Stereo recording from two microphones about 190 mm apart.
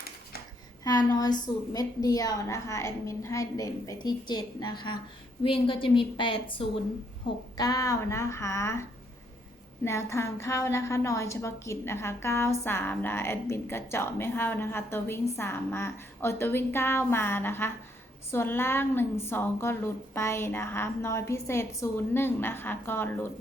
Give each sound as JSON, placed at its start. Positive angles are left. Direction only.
{"t": 0.9, "sound": "a woman's voice", "side_deg": 20}